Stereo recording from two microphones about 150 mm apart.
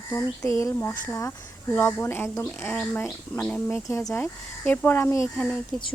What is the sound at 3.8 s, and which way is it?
Speech, 20° left (ahead or behind).